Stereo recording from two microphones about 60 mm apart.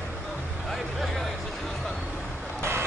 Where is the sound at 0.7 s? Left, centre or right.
Centre.